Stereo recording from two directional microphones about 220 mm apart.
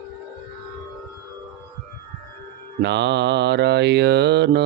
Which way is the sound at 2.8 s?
50° right (ahead or behind).